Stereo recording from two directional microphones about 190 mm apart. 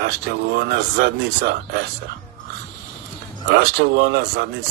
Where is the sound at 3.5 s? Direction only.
55° right (ahead or behind).